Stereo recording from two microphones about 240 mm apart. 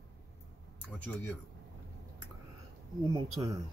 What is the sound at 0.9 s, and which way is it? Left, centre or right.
Speech, centre.